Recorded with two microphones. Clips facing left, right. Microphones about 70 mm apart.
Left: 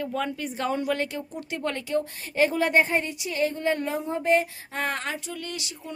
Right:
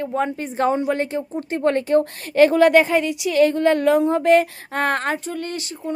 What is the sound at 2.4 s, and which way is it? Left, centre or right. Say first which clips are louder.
A woman's voice: right 9 dB; right.